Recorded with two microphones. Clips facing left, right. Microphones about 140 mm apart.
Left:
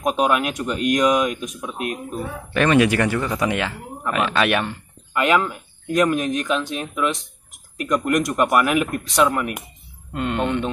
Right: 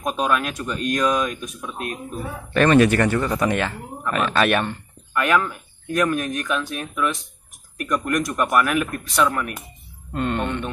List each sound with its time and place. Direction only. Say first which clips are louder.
0.0 s speech: left 3 dB; 15° left (ahead or behind)
10.1 s speech: left 2 dB; 15° left (ahead or behind)